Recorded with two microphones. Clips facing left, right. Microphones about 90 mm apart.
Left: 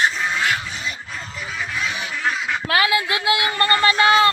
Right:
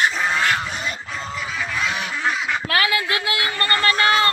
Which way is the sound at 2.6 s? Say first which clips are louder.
Left 3 dB; 20° left (ahead or behind).